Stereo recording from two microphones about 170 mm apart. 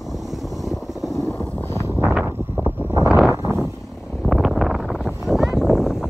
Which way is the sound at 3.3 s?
15° right (ahead or behind).